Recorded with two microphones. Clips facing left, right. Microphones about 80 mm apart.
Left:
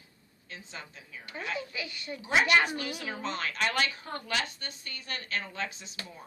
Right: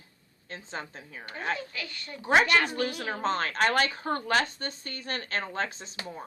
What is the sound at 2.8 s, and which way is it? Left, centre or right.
Speech, right.